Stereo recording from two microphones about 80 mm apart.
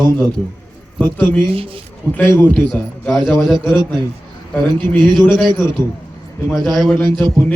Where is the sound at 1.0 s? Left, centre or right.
Left.